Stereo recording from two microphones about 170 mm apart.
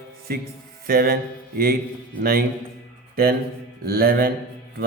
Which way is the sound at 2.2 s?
65° right (ahead or behind).